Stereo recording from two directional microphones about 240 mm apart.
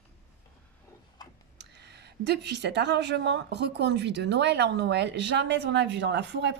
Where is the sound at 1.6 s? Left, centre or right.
Right.